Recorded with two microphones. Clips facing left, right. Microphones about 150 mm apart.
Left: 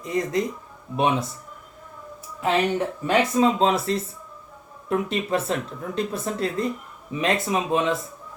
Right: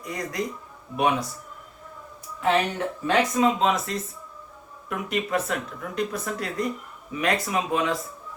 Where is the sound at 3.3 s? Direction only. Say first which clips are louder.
Left 2 dB; 30° left (ahead or behind).